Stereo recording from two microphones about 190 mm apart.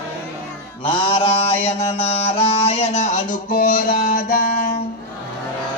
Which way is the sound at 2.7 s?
35° left (ahead or behind).